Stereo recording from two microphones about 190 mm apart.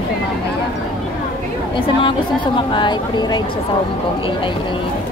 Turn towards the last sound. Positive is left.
turn(degrees=25)  # may be behind; listen again after turning